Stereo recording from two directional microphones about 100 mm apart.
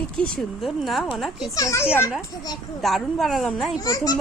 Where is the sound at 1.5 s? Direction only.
30° left (ahead or behind).